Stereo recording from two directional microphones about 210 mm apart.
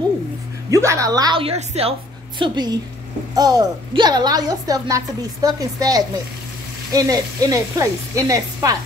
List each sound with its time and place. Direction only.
0.7 s a woman's voice: 15° right (ahead or behind)